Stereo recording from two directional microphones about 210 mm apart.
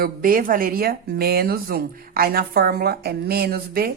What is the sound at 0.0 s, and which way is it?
Speech, 45° right (ahead or behind).